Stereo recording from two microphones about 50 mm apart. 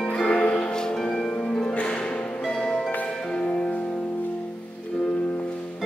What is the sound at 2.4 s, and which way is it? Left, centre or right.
Music, centre.